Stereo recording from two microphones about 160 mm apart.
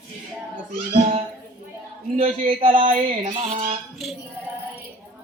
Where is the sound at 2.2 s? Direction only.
50° right (ahead or behind).